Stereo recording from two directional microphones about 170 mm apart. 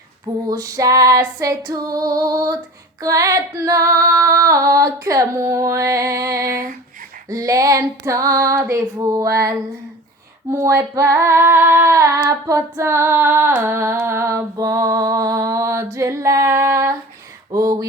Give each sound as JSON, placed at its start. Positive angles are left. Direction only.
{"t": 0.4, "sound": "female singing", "side_deg": -20}
{"t": 6.4, "sound": "a sound", "side_deg": -55}
{"t": 7.3, "sound": "female singing", "side_deg": -20}